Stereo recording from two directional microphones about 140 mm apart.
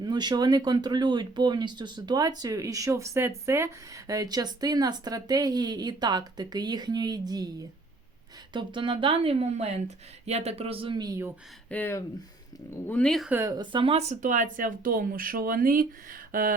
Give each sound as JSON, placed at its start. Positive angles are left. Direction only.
{"t": 0.0, "sound": "speech", "side_deg": -30}
{"t": 8.5, "sound": "speech", "side_deg": -35}
{"t": 11.7, "sound": "speech", "side_deg": 15}
{"t": 13.4, "sound": "speech", "side_deg": -30}